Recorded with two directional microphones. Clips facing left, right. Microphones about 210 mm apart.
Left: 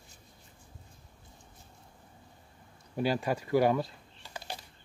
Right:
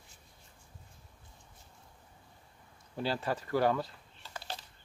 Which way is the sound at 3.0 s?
15° left (ahead or behind).